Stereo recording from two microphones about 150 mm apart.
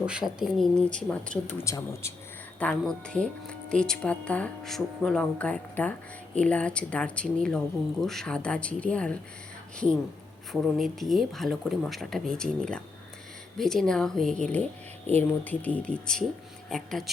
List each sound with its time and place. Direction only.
0.0 s speech: 5° right (ahead or behind)
0.8 s speech: 5° left (ahead or behind)
1.6 s speech: 20° left (ahead or behind)
2.6 s speech: 5° left (ahead or behind)